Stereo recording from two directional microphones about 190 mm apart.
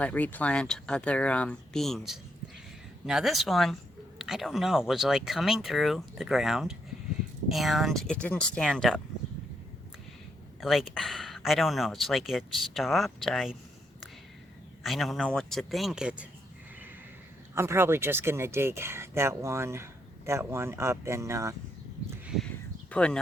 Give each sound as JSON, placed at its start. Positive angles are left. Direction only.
{"t": 0.0, "sound": "speech", "side_deg": 10}
{"t": 10.6, "sound": "speech", "side_deg": 0}
{"t": 14.8, "sound": "speech", "side_deg": 0}
{"t": 17.5, "sound": "speech", "side_deg": -15}
{"t": 22.9, "sound": "speech", "side_deg": 5}